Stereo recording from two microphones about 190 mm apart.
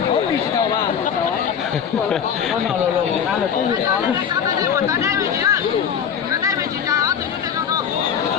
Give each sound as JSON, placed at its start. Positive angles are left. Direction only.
{"t": 4.6, "sound": "speech", "side_deg": -15}